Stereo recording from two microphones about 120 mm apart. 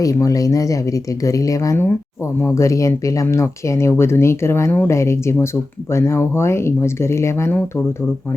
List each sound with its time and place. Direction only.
0.0 s speech: 30° left (ahead or behind)